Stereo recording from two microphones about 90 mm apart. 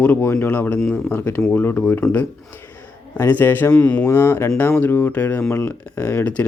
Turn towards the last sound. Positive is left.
turn(degrees=15)  # may be behind; listen again after turning